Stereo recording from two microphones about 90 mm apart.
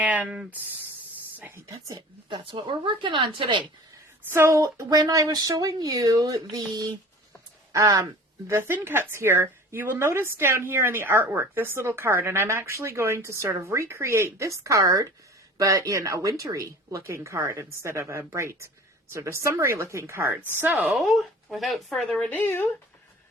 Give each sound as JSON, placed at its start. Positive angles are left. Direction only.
{"t": 0.0, "sound": "speech", "side_deg": -15}
{"t": 1.5, "sound": "a woman's voice", "side_deg": -35}
{"t": 2.3, "sound": "a woman's voice", "side_deg": -70}
{"t": 4.3, "sound": "speech", "side_deg": -30}
{"t": 4.6, "sound": "a woman's voice", "side_deg": -45}
{"t": 20.8, "sound": "speech", "side_deg": 0}
{"t": 22.3, "sound": "speech", "side_deg": 20}